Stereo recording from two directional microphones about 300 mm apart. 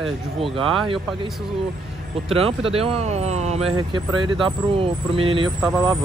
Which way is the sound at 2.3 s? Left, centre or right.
Centre.